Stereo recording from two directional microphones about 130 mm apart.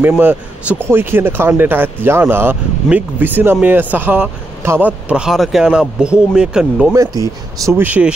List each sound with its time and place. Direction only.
0.2 s speech: 15° right (ahead or behind)
6.9 s speech: 25° right (ahead or behind)
7.8 s speech: 10° right (ahead or behind)